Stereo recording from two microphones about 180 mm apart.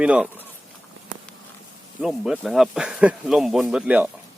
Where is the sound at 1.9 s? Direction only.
Centre (ahead or behind).